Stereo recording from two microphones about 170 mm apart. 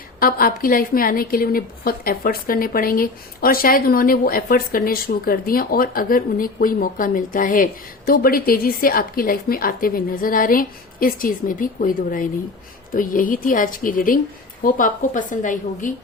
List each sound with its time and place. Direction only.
0.2 s a woman's voice: 55° left (ahead or behind)